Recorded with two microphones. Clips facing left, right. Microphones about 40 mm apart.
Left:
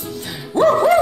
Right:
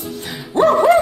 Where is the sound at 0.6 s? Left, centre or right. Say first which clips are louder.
Right 1 dB; centre.